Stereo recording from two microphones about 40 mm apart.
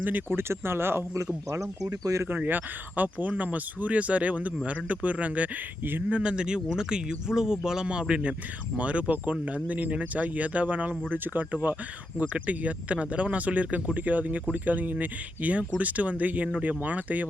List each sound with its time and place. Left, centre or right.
0.0 s speech: right
0.3 s speech: right
2.2 s speech: right
6.2 s speech: right
12.3 s speech: right